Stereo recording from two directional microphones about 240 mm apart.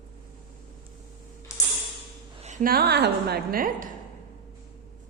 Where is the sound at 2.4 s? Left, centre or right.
Right.